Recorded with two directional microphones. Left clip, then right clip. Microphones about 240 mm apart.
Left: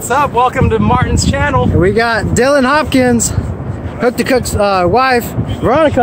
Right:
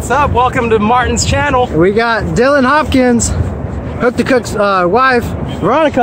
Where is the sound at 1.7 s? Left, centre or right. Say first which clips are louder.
Right 1 dB; centre.